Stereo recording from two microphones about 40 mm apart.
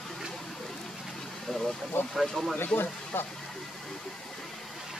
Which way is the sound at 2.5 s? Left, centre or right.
Left.